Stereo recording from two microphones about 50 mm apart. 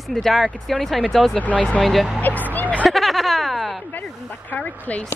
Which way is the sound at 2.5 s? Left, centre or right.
Left.